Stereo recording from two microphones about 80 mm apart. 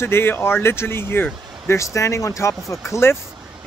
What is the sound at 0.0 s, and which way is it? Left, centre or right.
Speech, left.